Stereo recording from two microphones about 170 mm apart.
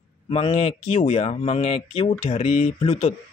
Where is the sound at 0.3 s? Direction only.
35° left (ahead or behind).